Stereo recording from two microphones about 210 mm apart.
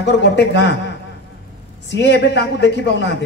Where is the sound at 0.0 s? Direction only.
55° left (ahead or behind).